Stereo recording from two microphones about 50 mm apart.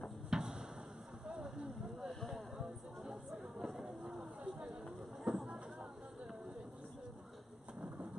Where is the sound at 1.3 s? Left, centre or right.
Centre.